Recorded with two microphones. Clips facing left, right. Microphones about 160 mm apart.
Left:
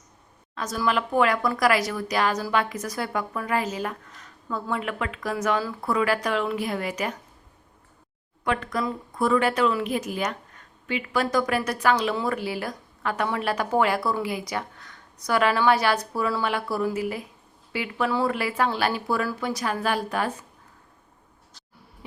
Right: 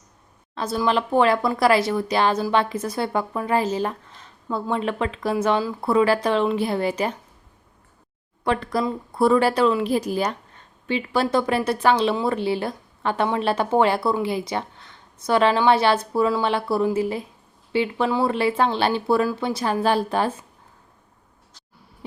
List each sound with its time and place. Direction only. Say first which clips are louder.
0.5 s a woman's voice: right 4 dB; 30° right (ahead or behind)
8.4 s a woman's voice: right 4 dB; 35° right (ahead or behind)